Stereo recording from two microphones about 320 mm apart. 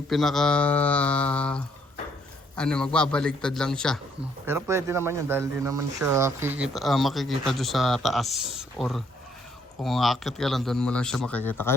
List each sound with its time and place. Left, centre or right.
0.1 s speech: centre